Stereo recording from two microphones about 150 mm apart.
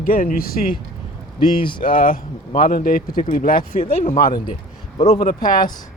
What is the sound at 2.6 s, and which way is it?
Speech, 70° left (ahead or behind).